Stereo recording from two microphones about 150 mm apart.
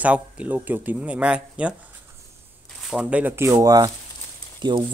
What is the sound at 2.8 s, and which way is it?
Speech, 5° right (ahead or behind).